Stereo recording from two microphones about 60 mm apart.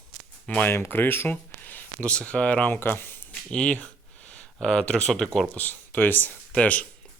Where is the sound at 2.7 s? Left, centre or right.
Left.